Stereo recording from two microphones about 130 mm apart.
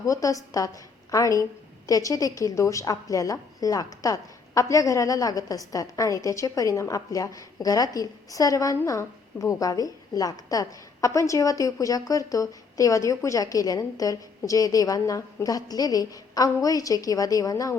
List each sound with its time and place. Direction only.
0.0 s a woman's voice: 25° left (ahead or behind)